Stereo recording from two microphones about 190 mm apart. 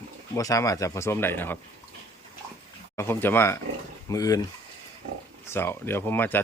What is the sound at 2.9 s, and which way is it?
Speech, 10° left (ahead or behind).